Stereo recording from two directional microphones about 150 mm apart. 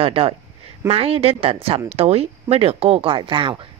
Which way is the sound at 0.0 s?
40° right (ahead or behind).